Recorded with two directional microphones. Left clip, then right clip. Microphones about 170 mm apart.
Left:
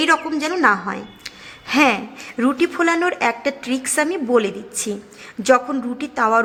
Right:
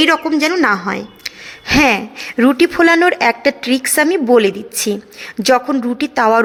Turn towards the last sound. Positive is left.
turn(degrees=-30)  # may be behind; listen again after turning